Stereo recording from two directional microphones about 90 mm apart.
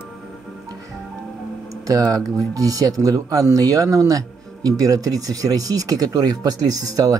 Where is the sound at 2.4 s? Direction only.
40° right (ahead or behind).